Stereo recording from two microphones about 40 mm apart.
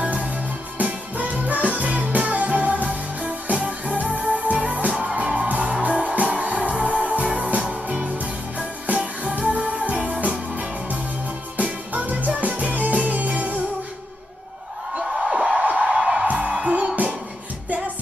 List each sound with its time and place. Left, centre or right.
0.0 s music: right
15.0 s a sound: centre
15.6 s music: right
15.9 s music: centre
16.3 s music: right